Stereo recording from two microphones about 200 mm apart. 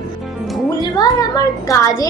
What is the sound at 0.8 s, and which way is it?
A child's voice, 20° left (ahead or behind).